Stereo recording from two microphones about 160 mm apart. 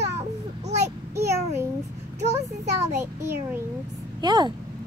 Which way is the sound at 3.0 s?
15° right (ahead or behind).